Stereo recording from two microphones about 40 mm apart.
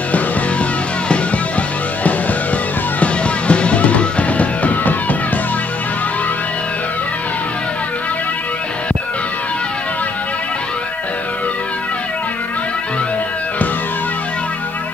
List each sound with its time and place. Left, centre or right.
0.1 s music: left
3.0 s music: left